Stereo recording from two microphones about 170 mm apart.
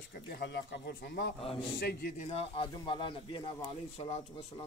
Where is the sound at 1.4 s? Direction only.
35° left (ahead or behind).